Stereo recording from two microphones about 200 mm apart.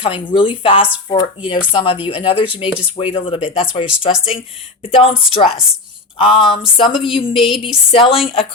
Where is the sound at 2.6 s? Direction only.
5° right (ahead or behind).